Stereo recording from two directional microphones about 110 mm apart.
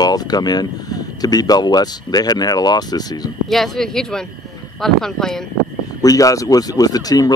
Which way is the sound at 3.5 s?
5° left (ahead or behind).